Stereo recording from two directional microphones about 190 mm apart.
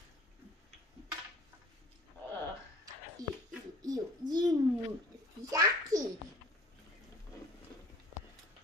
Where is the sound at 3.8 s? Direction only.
20° right (ahead or behind).